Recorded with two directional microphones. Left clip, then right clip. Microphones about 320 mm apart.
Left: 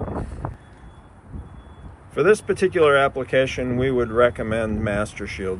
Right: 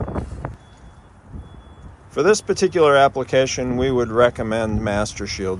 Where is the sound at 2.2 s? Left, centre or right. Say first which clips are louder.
Right 1 dB; centre.